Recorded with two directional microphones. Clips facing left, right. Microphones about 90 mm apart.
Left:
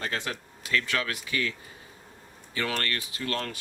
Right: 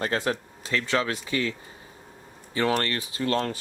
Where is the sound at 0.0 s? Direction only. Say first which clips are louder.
Right 6 dB; 35° right (ahead or behind).